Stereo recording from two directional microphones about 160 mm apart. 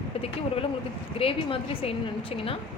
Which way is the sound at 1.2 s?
35° left (ahead or behind).